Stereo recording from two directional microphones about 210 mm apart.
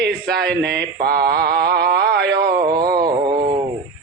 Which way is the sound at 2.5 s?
20° right (ahead or behind).